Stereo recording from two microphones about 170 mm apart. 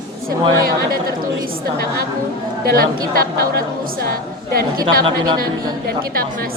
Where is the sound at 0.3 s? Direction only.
60° right (ahead or behind).